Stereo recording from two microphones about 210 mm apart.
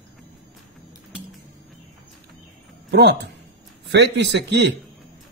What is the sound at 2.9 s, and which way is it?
A man's voice, 55° right (ahead or behind).